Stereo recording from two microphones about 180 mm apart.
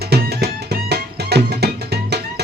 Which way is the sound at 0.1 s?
65° right (ahead or behind).